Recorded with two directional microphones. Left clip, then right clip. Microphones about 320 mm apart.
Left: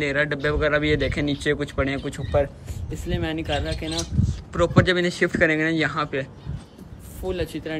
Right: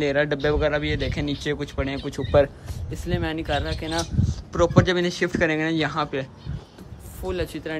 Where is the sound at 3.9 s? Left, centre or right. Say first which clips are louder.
Right 2 dB; right.